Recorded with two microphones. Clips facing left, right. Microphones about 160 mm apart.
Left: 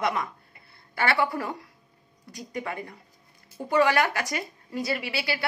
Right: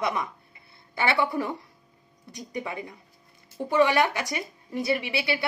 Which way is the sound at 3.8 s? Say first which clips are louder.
Even; 20° right (ahead or behind).